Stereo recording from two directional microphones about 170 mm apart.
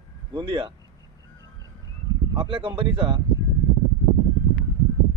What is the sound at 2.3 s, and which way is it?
Speech, 30° right (ahead or behind).